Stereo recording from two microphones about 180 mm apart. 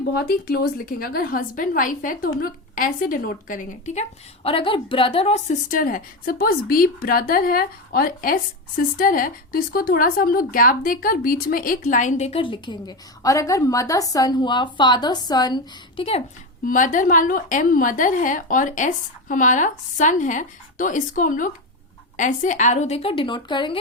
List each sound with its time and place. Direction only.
0.1 s a woman's voice: 60° left (ahead or behind); by 4.0 s 45° left (ahead or behind)
4.4 s a woman's voice: 30° left (ahead or behind)
16.6 s a woman's voice: 45° left (ahead or behind); by 23.7 s 25° left (ahead or behind)